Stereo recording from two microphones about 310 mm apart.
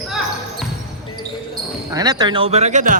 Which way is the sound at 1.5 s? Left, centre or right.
Centre.